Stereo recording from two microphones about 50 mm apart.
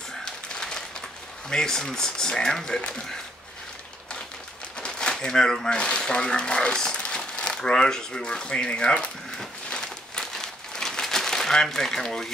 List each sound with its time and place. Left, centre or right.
0.2 s typewriter: centre
1.5 s speech: centre
4.7 s a sound: centre
5.8 s speech: centre
9.4 s crumpling: centre